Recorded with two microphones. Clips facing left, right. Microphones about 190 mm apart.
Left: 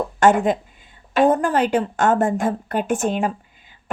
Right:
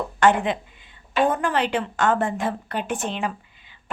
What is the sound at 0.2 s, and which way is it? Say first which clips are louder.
A woman's voice: left 3 dB; 45° left (ahead or behind).